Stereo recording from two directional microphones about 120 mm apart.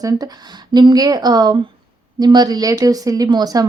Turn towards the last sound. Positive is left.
turn(degrees=-30)  # may be behind; listen again after turning